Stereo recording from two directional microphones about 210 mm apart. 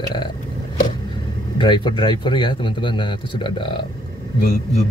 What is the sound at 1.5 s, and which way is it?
Speech, 20° left (ahead or behind).